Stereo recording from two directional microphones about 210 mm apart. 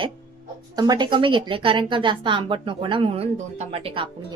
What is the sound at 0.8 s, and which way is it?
A woman's voice, 20° right (ahead or behind).